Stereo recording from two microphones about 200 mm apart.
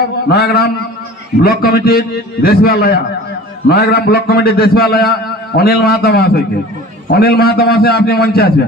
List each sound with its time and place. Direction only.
0.3 s a man's voice: 50° left (ahead or behind)